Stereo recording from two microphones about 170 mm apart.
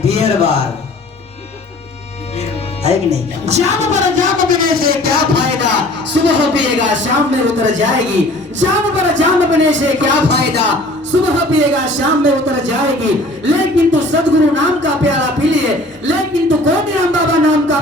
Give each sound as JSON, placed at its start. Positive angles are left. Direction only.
{"t": 0.0, "sound": "music", "side_deg": -35}
{"t": 2.8, "sound": "a woman's voice", "side_deg": -40}
{"t": 6.2, "sound": "speech", "side_deg": -90}
{"t": 11.1, "sound": "speech", "side_deg": -90}